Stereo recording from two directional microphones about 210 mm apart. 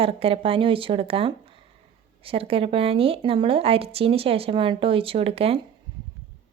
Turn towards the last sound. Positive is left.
turn(degrees=-30)  # may be behind; listen again after turning